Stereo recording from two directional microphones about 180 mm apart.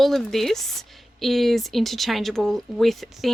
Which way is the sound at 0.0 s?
Centre (ahead or behind).